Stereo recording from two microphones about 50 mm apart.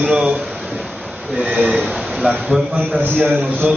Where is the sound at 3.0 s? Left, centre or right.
Right.